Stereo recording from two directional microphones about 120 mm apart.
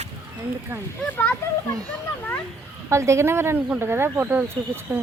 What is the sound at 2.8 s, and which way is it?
Speech, 25° right (ahead or behind).